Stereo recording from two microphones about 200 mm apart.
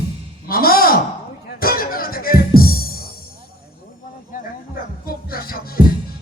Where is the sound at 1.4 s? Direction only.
50° left (ahead or behind).